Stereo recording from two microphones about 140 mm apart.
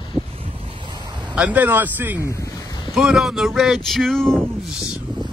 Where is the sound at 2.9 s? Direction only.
Centre (ahead or behind).